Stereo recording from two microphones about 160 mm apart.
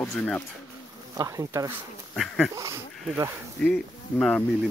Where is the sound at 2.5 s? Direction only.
20° right (ahead or behind).